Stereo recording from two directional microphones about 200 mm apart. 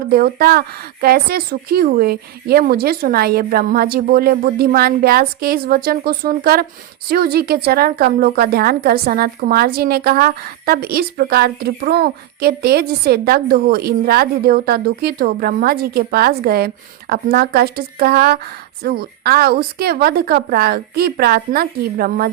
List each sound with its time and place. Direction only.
0.1 s a woman's voice: 50° right (ahead or behind)